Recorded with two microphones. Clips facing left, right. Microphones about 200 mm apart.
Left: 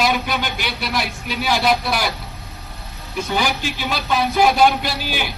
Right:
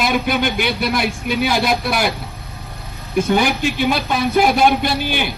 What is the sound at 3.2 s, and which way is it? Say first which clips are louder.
A man's voice: right 4 dB; 50° right (ahead or behind).